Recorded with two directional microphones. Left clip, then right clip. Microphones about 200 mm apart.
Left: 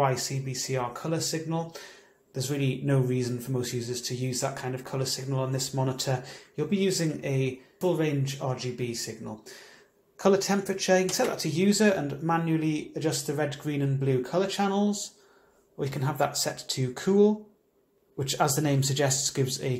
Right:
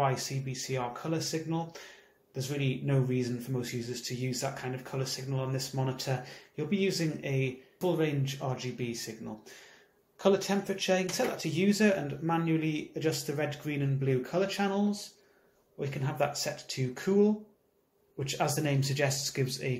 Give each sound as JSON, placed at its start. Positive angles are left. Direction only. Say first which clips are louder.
{"t": 0.0, "sound": "speech", "louder": "left 4 dB", "side_deg": 10}
{"t": 16.4, "sound": "speech", "louder": "left 4 dB", "side_deg": 20}